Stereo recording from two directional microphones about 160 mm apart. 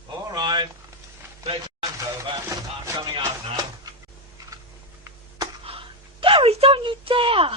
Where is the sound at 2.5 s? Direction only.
20° right (ahead or behind).